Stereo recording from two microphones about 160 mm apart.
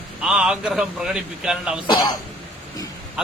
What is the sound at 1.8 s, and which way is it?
Speech, 25° left (ahead or behind).